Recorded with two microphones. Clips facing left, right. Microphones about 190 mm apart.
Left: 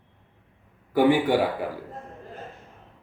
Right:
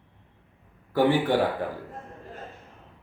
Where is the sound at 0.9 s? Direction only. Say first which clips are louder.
Left 2 dB; 15° left (ahead or behind).